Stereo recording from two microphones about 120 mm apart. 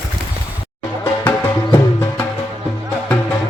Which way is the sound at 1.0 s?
15° left (ahead or behind).